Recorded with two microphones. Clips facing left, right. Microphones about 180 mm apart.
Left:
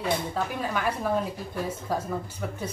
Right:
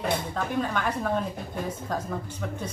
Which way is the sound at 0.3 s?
5° left (ahead or behind).